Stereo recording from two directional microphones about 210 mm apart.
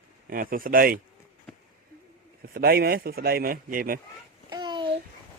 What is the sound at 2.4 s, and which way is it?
Speech, 50° right (ahead or behind).